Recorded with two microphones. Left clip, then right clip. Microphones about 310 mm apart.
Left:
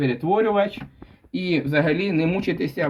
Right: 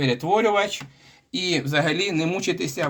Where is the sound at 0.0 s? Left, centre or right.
Right.